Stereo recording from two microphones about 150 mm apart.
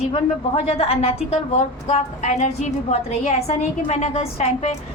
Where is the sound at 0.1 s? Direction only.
45° left (ahead or behind).